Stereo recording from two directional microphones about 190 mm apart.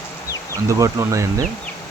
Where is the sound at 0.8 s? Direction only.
15° right (ahead or behind).